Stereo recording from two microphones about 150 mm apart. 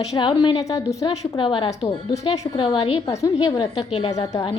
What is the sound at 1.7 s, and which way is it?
Speech, 45° left (ahead or behind).